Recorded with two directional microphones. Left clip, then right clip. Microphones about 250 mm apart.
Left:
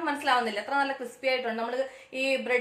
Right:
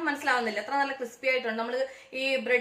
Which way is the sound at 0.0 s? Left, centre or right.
Centre.